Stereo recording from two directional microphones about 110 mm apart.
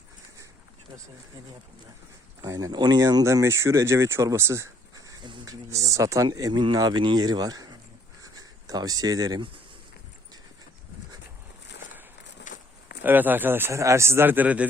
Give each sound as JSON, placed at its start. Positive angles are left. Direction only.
{"t": 2.5, "sound": "speech", "side_deg": -30}
{"t": 8.2, "sound": "writing", "side_deg": -35}
{"t": 13.0, "sound": "speech", "side_deg": -15}